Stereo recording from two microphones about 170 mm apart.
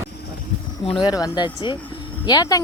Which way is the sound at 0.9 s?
25° left (ahead or behind).